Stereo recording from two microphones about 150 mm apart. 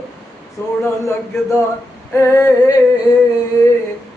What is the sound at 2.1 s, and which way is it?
Female singing, 20° left (ahead or behind).